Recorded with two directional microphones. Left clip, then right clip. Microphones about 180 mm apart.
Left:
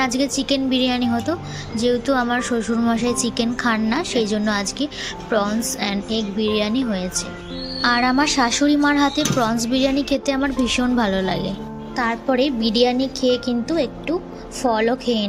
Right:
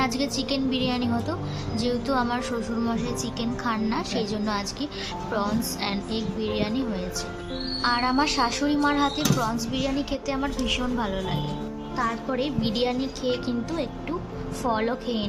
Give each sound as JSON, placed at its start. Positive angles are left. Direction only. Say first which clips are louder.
{"t": 0.0, "sound": "a woman's voice", "louder": "left 5 dB", "side_deg": 20}